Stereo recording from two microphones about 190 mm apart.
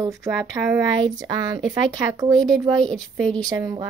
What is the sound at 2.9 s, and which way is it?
Child singing, centre (ahead or behind).